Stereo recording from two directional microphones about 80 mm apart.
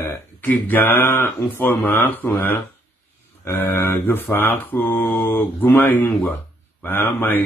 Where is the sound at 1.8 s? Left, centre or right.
Left.